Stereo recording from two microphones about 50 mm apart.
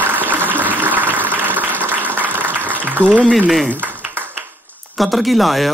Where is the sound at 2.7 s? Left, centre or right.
Right.